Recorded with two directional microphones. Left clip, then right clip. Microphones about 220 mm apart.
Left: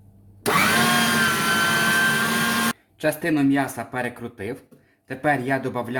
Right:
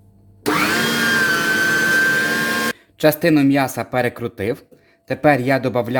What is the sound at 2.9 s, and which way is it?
Speech, 50° right (ahead or behind).